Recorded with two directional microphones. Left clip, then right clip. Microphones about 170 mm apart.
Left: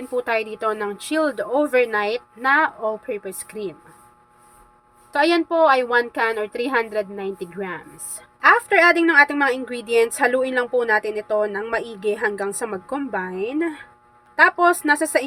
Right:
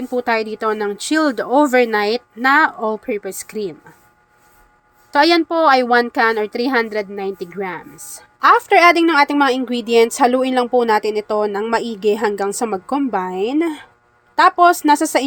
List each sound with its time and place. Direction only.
0.1 s a woman's voice: 30° right (ahead or behind)
5.1 s a woman's voice: 40° right (ahead or behind)